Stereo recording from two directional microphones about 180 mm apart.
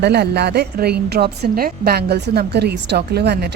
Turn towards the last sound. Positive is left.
turn(degrees=-65)  # may be behind; listen again after turning